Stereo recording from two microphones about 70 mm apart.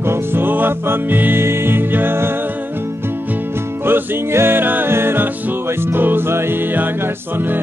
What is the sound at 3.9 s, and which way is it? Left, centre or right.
Music, right.